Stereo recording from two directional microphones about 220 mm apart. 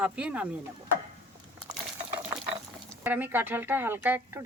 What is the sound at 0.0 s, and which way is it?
Speech, 5° right (ahead or behind).